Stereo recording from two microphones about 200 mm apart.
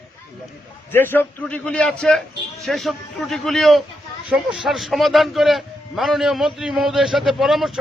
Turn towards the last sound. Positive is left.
turn(degrees=0)  # may be behind; listen again after turning